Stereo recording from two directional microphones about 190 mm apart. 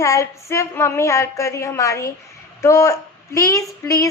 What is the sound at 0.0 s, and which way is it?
A woman's voice, 15° left (ahead or behind).